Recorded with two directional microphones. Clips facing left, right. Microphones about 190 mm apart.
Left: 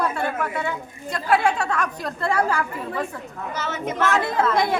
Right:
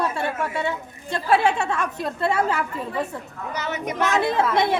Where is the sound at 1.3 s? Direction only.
25° right (ahead or behind).